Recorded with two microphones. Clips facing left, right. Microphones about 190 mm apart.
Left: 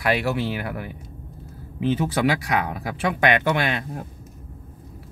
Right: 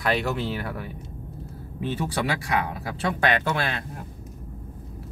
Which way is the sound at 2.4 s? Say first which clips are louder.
Left 2 dB; 15° left (ahead or behind).